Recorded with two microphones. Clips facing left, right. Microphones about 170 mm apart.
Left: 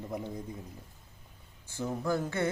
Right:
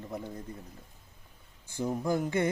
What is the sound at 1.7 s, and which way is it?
Speech, 15° right (ahead or behind).